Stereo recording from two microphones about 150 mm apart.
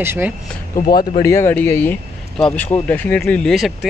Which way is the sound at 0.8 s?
75° left (ahead or behind).